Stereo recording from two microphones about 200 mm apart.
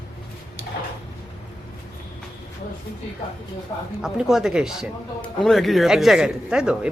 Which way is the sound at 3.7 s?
20° left (ahead or behind).